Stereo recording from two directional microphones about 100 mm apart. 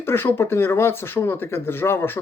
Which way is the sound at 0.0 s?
25° left (ahead or behind).